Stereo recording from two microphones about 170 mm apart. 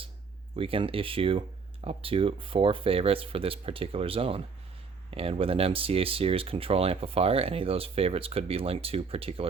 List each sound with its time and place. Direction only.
0.5 s speech: 30° right (ahead or behind)